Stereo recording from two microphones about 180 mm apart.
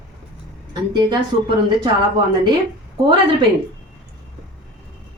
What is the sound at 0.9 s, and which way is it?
Speech, 25° right (ahead or behind).